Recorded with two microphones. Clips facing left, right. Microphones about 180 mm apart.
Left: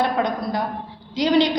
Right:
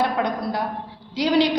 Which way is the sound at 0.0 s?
5° right (ahead or behind).